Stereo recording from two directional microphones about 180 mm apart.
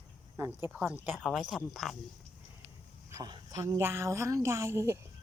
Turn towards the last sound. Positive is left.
turn(degrees=-15)  # may be behind; listen again after turning